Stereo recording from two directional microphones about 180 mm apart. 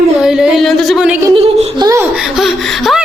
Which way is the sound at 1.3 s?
30° right (ahead or behind).